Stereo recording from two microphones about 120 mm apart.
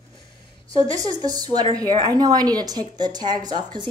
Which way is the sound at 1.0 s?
35° right (ahead or behind).